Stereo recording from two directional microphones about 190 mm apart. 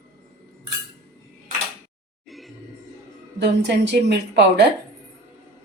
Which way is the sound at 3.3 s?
60° right (ahead or behind).